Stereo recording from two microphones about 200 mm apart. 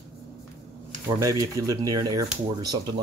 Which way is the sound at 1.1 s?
15° right (ahead or behind).